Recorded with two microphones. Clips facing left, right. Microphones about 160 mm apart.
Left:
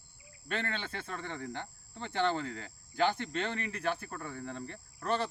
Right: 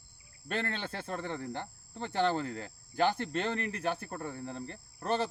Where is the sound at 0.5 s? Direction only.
35° right (ahead or behind).